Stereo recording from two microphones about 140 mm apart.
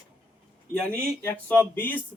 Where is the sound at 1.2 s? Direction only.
15° left (ahead or behind).